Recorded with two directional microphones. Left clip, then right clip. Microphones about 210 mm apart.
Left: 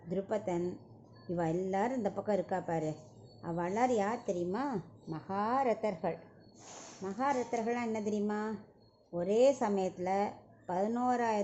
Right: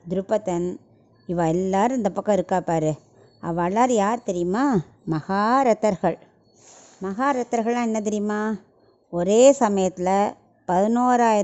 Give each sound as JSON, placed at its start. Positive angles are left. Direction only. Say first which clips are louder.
{"t": 0.1, "sound": "a woman's voice", "louder": "right 11 dB", "side_deg": -45}